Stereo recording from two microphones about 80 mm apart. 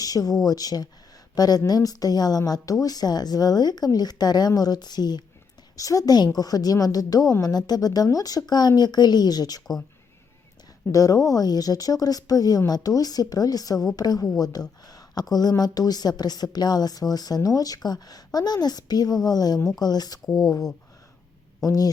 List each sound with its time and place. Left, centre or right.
0.0 s a woman's voice: left
5.7 s a woman's voice: left
10.9 s a woman's voice: left
20.2 s speech: centre
21.6 s speech: left